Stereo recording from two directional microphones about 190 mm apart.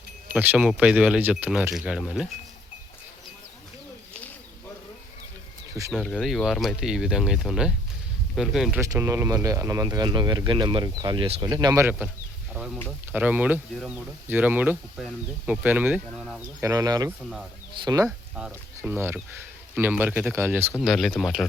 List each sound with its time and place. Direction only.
0.3 s speech: 10° right (ahead or behind)
5.9 s speech: 5° left (ahead or behind)
8.8 s speech: 15° right (ahead or behind)
20.7 s speech: centre (ahead or behind)